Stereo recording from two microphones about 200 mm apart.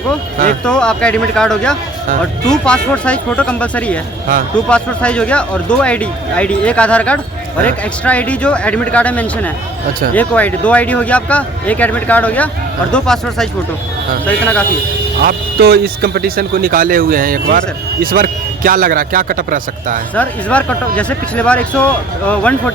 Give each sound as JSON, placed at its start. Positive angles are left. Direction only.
{"t": 0.6, "sound": "speech", "side_deg": 5}
{"t": 15.2, "sound": "speech", "side_deg": -50}
{"t": 20.1, "sound": "speech", "side_deg": 5}